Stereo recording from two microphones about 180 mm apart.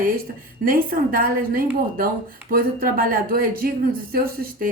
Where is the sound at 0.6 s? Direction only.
50° right (ahead or behind).